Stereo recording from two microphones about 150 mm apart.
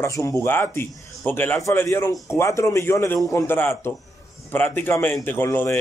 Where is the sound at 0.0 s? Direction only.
20° left (ahead or behind).